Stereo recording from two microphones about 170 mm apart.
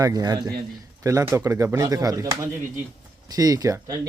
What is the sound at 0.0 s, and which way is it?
A man's voice, 20° right (ahead or behind).